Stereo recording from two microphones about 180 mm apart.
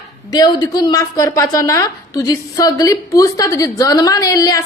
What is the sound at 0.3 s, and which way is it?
A woman's voice, 20° left (ahead or behind).